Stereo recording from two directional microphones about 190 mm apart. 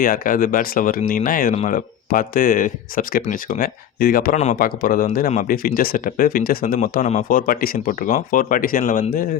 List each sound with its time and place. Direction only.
0.0 s speech: 50° left (ahead or behind)